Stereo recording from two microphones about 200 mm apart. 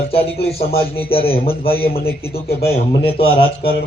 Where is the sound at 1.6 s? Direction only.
50° left (ahead or behind).